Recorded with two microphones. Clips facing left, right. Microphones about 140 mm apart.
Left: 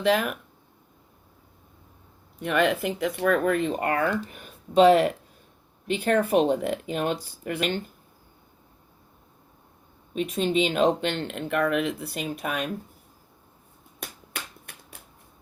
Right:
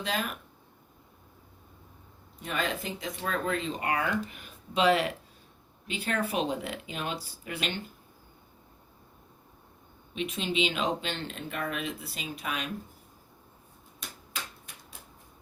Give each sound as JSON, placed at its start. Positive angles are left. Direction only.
{"t": 0.0, "sound": "speech", "side_deg": 65}
{"t": 2.4, "sound": "speech", "side_deg": 65}
{"t": 10.2, "sound": "speech", "side_deg": 45}
{"t": 14.3, "sound": "a sound", "side_deg": 60}